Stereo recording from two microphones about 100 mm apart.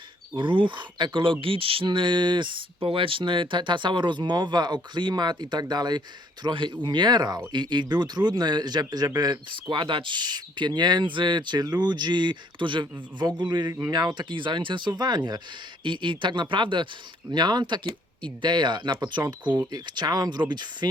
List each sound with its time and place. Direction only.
0.3 s speech: 55° right (ahead or behind)